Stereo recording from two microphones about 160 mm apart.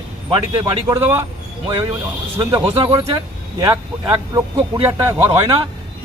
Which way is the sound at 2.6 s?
35° right (ahead or behind).